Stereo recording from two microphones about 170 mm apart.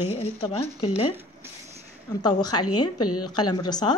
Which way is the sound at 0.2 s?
35° left (ahead or behind).